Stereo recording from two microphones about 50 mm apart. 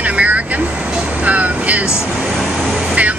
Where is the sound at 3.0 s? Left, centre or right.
Right.